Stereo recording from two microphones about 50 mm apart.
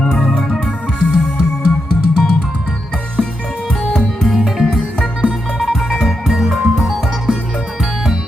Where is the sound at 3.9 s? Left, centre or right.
Centre.